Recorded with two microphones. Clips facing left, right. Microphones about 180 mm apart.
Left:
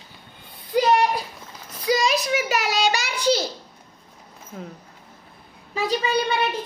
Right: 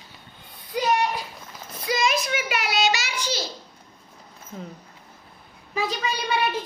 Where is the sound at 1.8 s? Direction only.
35° left (ahead or behind).